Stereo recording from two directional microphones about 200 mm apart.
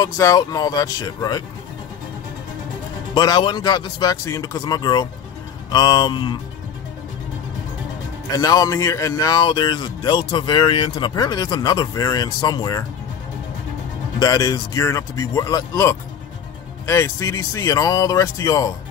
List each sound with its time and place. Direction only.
0.0 s speech: 15° left (ahead or behind)
3.2 s speech: 20° left (ahead or behind)
8.4 s speech: 20° left (ahead or behind)
14.2 s speech: 20° left (ahead or behind)